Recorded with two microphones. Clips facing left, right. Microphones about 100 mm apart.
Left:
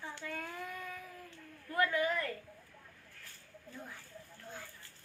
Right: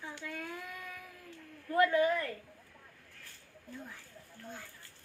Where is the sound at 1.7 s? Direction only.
25° right (ahead or behind).